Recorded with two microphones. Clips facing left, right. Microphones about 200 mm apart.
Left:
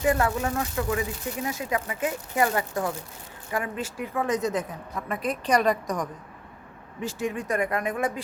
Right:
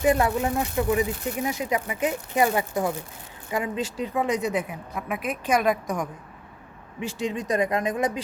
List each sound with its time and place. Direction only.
0.0 s speech: 20° right (ahead or behind)
7.2 s speech: 20° right (ahead or behind)